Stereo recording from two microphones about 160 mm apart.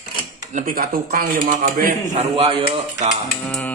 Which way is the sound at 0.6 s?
65° right (ahead or behind).